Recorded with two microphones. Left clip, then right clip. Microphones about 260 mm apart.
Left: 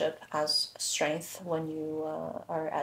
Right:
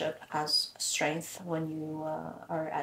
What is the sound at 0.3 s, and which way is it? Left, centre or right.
Speech, left.